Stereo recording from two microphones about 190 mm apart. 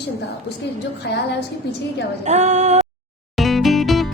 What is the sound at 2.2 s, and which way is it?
Female singing, 35° right (ahead or behind).